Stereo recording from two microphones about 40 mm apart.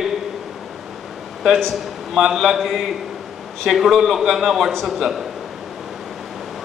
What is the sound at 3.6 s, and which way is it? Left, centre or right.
Speech, centre.